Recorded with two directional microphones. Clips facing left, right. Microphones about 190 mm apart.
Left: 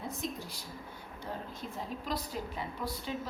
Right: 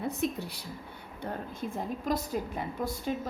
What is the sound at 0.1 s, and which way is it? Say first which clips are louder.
Speech: right 7 dB; 65° right (ahead or behind).